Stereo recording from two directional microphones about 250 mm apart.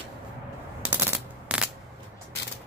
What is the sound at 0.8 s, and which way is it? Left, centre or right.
Machine gun, centre.